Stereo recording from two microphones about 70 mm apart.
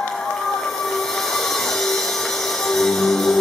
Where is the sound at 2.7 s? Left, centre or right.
Centre.